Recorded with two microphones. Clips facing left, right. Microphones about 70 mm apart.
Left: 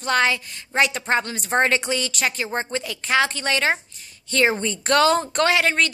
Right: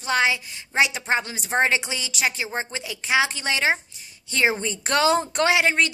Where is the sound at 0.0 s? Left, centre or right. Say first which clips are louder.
Left 2 dB; centre.